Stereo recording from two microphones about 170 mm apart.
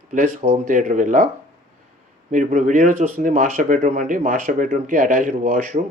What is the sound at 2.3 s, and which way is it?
Speech, 50° right (ahead or behind).